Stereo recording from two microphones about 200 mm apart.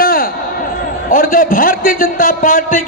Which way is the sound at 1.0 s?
45° left (ahead or behind).